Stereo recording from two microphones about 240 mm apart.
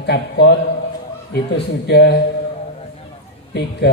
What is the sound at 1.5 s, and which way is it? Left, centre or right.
Speech, left.